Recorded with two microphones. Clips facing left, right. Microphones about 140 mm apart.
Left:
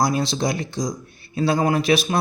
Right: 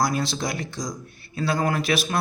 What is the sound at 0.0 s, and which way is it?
Speech, 20° left (ahead or behind).